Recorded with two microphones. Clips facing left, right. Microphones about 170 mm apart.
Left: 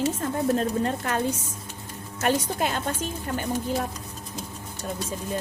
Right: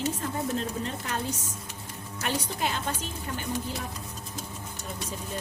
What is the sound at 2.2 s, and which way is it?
Speech, 50° left (ahead or behind).